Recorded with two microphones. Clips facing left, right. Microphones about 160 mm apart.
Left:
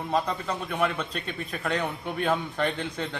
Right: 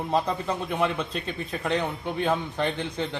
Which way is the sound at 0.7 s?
25° right (ahead or behind).